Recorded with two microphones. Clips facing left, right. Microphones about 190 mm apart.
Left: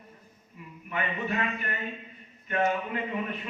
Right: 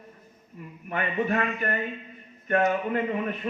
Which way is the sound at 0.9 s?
50° right (ahead or behind).